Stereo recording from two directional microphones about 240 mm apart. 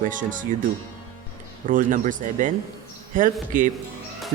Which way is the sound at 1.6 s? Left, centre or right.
Right.